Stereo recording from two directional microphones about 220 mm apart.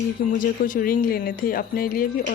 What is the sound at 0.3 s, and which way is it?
Speech, 40° left (ahead or behind).